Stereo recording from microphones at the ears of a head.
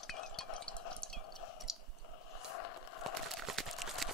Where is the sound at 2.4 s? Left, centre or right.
Left.